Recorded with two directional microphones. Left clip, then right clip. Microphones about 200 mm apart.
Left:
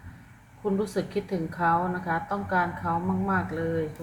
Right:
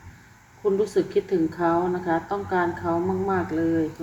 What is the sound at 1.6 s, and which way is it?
A woman's voice, 25° right (ahead or behind).